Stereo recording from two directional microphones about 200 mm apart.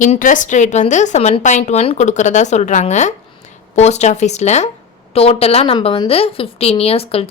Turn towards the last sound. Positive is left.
turn(degrees=30)  # may be behind; listen again after turning